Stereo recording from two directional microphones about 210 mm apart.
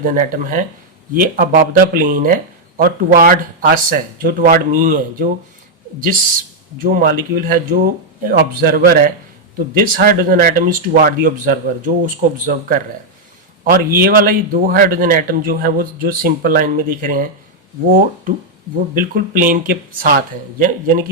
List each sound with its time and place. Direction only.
0.0 s speech: 40° right (ahead or behind)
6.8 s a man's voice: 45° right (ahead or behind)